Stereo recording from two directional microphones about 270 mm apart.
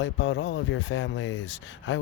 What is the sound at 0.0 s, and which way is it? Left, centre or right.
Speech, left.